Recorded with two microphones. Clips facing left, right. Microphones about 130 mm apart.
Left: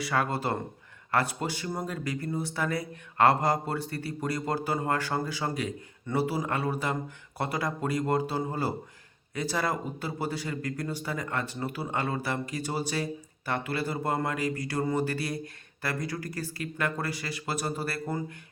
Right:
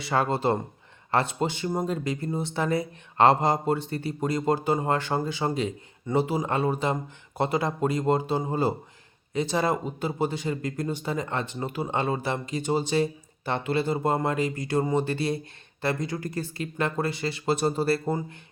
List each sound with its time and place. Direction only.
0.0 s a man's voice: 25° right (ahead or behind)